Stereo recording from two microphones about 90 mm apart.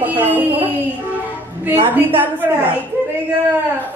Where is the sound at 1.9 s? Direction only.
20° right (ahead or behind).